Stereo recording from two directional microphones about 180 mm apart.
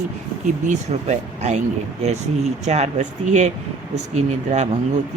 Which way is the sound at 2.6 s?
40° right (ahead or behind).